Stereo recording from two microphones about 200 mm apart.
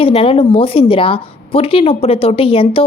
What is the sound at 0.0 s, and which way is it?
Speech, 25° left (ahead or behind).